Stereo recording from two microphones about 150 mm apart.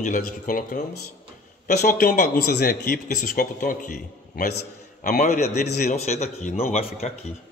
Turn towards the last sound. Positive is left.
turn(degrees=45)  # may be behind; listen again after turning